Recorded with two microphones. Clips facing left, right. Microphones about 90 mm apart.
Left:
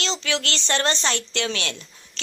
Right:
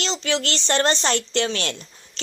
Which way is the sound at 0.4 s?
35° right (ahead or behind).